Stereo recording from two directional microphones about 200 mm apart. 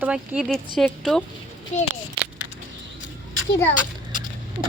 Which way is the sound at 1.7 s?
35° left (ahead or behind).